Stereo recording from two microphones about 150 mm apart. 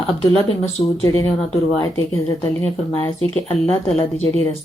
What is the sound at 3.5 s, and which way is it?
A woman's voice, 40° left (ahead or behind).